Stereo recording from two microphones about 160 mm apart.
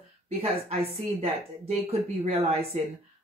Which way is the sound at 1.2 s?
40° right (ahead or behind).